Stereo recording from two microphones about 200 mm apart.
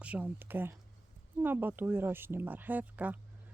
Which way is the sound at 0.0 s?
5° right (ahead or behind).